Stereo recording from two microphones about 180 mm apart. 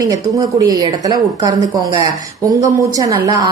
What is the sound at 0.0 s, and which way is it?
A woman's voice, 20° right (ahead or behind).